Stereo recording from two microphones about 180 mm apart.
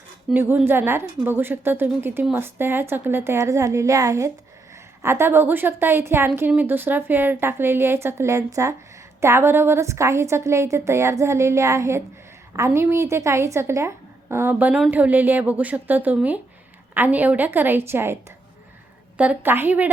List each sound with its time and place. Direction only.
0.3 s a woman's voice: 10° right (ahead or behind)